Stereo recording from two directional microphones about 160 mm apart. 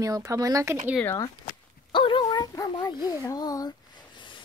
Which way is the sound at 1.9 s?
30° left (ahead or behind).